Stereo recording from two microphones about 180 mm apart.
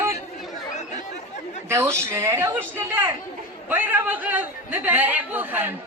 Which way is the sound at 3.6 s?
10° right (ahead or behind).